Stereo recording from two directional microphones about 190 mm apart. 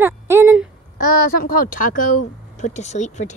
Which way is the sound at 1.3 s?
50° left (ahead or behind).